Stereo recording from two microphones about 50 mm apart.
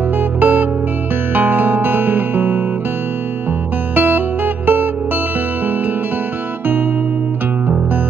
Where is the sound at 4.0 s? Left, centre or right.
Right.